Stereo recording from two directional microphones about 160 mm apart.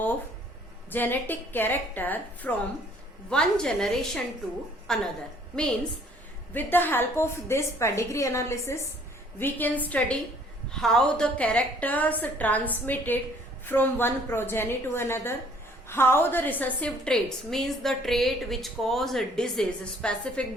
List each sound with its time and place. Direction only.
0.9 s a woman's voice: 10° left (ahead or behind)
6.5 s a woman's voice: 10° left (ahead or behind)